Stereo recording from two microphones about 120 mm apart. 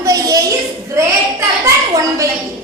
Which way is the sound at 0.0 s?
30° right (ahead or behind).